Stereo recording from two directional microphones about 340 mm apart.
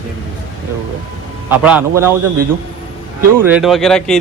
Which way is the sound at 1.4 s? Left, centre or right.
Centre.